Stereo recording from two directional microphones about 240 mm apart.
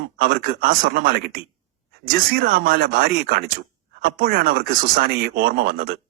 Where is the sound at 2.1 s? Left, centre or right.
Right.